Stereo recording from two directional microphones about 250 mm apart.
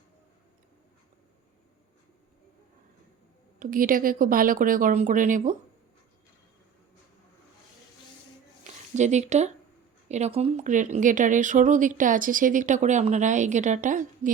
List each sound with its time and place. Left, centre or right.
3.6 s speech: right
8.6 s a sound: right
10.1 s speech: right